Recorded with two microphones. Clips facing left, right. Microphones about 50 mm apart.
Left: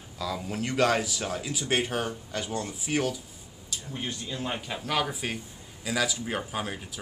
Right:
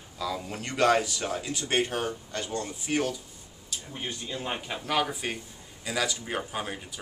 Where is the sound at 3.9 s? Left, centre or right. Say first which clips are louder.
Left 1 dB; centre.